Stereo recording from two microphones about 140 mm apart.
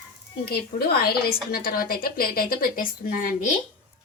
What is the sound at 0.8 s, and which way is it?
A woman's voice, 90° left.